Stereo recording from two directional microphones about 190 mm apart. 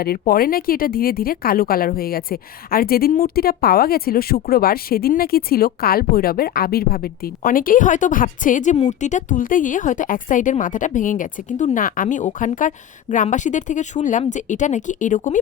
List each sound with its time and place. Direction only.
0.0 s speech: 50° left (ahead or behind)